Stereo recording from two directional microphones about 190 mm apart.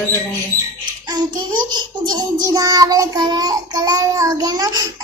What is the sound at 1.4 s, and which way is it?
A child's voice, 20° right (ahead or behind).